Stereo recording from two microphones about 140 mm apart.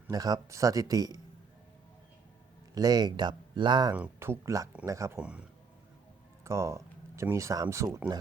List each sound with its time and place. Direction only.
0.1 s speech: 25° right (ahead or behind)
2.7 s speech: 30° right (ahead or behind)
3.9 s speech: 15° right (ahead or behind)
5.1 s speech: 10° right (ahead or behind)
6.4 s speech: 20° right (ahead or behind)